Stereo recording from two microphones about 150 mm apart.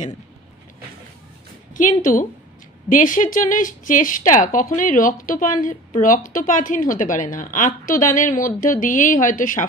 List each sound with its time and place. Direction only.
1.7 s a woman's voice: 60° left (ahead or behind)